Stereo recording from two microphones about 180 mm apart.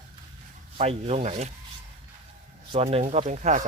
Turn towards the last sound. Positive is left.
turn(degrees=-40)  # may be behind; listen again after turning